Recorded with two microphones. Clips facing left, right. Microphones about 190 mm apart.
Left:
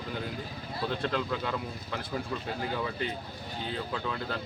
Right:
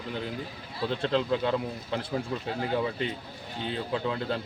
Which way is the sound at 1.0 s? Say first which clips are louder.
Right 8 dB; 25° right (ahead or behind).